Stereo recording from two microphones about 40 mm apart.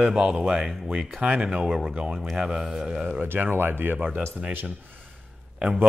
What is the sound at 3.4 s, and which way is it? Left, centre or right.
Speech, right.